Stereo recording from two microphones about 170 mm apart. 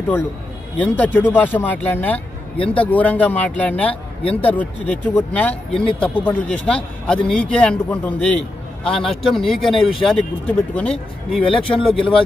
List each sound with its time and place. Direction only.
0.7 s speech: 10° left (ahead or behind)
2.5 s speech: 30° left (ahead or behind)
2.8 s speech: 10° left (ahead or behind)
4.2 s speech: 35° left (ahead or behind)
4.5 s speech: 10° left (ahead or behind)
11.4 s speech: 30° left (ahead or behind)